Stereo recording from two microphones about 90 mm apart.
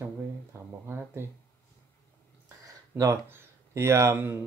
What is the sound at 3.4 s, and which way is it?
Speech, 30° right (ahead or behind).